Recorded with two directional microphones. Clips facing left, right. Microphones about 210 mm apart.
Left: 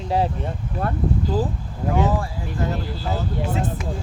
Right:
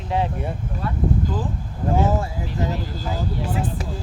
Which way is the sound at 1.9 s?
25° right (ahead or behind).